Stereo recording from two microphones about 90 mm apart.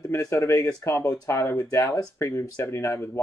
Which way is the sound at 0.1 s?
35° left (ahead or behind).